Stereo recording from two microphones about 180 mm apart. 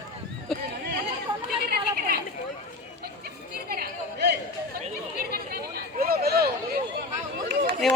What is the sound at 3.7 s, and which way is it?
Chatter, 60° right (ahead or behind).